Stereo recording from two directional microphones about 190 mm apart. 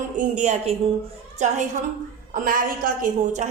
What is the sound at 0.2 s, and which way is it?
A woman's voice, 40° right (ahead or behind).